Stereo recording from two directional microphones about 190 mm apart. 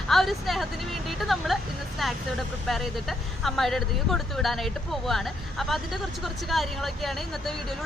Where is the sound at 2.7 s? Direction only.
Centre (ahead or behind).